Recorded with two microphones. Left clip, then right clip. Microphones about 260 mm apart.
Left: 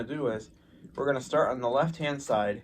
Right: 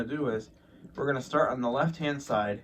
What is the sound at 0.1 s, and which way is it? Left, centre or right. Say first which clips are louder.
Speech: even; left.